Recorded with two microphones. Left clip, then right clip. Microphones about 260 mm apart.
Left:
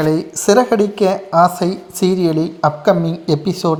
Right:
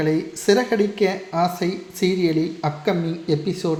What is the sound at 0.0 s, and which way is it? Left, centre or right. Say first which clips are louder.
Speech: left 5 dB; centre.